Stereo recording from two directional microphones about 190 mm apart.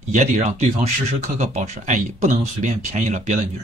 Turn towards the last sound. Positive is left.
turn(degrees=-40)  # may be behind; listen again after turning